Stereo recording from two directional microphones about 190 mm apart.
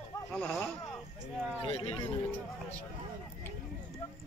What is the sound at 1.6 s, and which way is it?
Speech, 30° left (ahead or behind).